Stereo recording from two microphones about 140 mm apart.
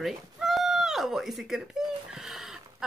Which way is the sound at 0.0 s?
Centre (ahead or behind).